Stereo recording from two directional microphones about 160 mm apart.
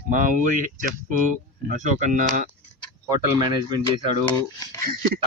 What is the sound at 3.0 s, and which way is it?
Speech, 25° right (ahead or behind).